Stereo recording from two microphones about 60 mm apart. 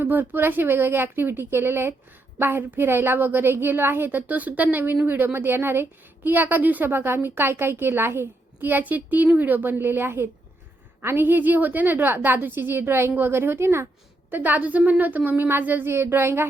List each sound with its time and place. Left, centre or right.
0.0 s a woman's voice: right
14.3 s a woman's voice: right